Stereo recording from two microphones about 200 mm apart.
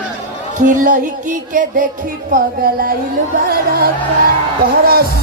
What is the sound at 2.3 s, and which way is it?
Music, 45° right (ahead or behind).